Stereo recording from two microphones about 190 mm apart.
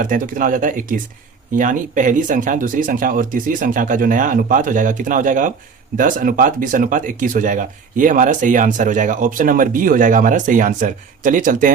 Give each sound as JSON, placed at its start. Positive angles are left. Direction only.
{"t": 0.0, "sound": "speech", "side_deg": -45}